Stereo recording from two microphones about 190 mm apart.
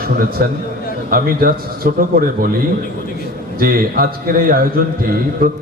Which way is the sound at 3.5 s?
50° right (ahead or behind).